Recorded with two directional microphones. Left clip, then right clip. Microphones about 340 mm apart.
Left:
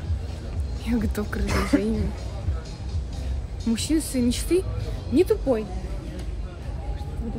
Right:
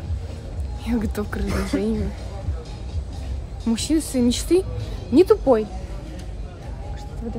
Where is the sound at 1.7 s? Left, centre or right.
Left.